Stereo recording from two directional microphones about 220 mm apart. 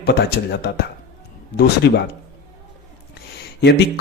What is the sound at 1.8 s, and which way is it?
Speech, 50° left (ahead or behind).